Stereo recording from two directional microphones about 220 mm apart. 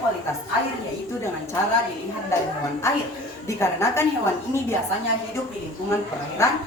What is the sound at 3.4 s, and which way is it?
Speech, 10° left (ahead or behind).